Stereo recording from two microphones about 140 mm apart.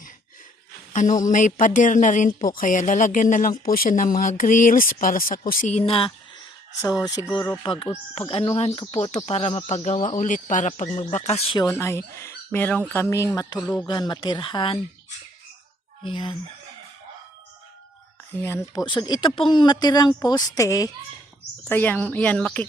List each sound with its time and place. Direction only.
0.9 s speech: 65° left (ahead or behind); by 5.4 s 85° left
5.5 s speech: 65° left (ahead or behind); by 6.1 s 40° left (ahead or behind)
7.2 s speech: 25° left (ahead or behind)
7.6 s speech: 35° left (ahead or behind); by 11.4 s 50° left (ahead or behind)
11.5 s speech: 20° left (ahead or behind)
13.6 s a woman's voice: 10° left (ahead or behind)
13.8 s speech: 30° left (ahead or behind)
16.0 s speech: 35° left (ahead or behind)
18.3 s speech: 15° left (ahead or behind)
21.7 s a woman's voice: 10° left (ahead or behind)